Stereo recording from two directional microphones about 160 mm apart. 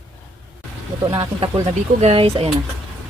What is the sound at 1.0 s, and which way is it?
Speech, 35° right (ahead or behind).